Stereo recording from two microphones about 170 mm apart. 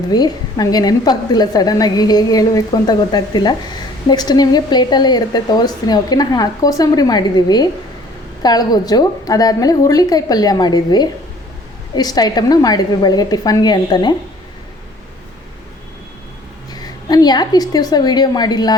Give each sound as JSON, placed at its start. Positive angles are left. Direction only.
{"t": 0.1, "sound": "speech", "side_deg": 25}
{"t": 16.7, "sound": "speech", "side_deg": 25}